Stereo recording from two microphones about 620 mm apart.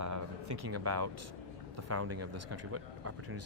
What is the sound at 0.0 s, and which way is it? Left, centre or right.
Music, right.